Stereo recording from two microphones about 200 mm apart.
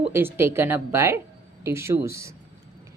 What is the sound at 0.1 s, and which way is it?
A woman's voice, 10° right (ahead or behind).